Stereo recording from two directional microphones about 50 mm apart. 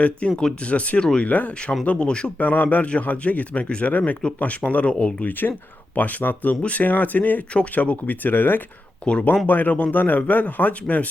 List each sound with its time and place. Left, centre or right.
0.0 s speech: left
2.4 s speech: left
5.2 s speech: left
9.0 s speech: centre
9.5 s speech: left